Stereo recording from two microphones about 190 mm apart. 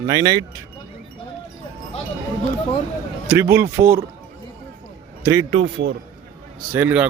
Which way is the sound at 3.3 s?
10° right (ahead or behind).